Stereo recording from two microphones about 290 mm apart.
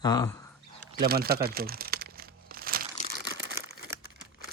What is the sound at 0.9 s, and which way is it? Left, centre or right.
Crumpling, right.